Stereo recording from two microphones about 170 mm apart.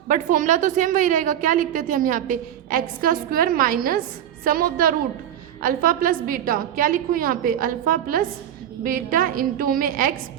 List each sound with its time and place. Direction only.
0.1 s a woman's voice: 50° right (ahead or behind)